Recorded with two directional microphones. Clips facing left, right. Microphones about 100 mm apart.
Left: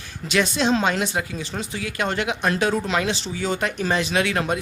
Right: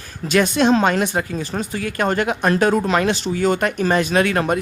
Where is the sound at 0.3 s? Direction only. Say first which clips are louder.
Right 5 dB; 50° right (ahead or behind).